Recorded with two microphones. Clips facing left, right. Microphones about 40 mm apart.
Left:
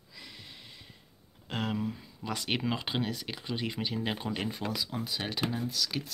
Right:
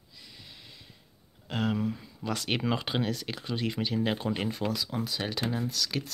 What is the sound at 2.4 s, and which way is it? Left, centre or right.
Speech, centre.